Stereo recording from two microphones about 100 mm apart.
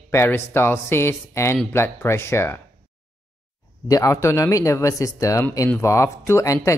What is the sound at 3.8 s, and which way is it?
Speech, 35° left (ahead or behind).